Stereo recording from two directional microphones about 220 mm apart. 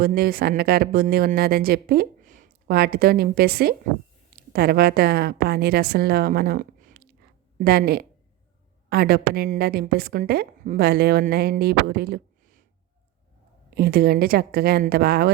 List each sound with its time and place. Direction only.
0.0 s a woman's voice: 45° right (ahead or behind)
13.7 s a woman's voice: 45° right (ahead or behind)